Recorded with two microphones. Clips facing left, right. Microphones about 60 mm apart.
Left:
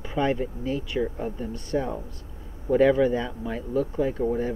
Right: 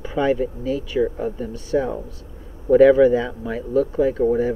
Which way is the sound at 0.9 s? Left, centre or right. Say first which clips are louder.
Right 6 dB; centre.